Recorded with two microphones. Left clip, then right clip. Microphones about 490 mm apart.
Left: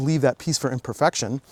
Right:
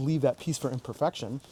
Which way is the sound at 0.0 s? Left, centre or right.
Left.